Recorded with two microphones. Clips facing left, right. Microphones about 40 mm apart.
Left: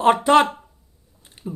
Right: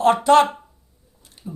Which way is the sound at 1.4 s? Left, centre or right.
Left.